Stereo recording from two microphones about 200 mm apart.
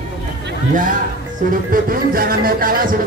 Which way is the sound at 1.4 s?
45° right (ahead or behind).